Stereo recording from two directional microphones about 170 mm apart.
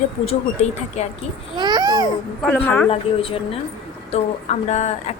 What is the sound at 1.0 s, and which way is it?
Speech, 40° left (ahead or behind).